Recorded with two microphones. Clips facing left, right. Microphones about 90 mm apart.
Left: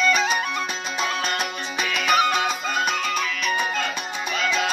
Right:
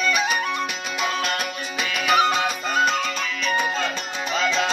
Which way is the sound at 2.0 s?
20° right (ahead or behind).